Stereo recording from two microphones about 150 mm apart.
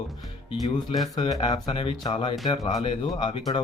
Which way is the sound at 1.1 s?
30° left (ahead or behind).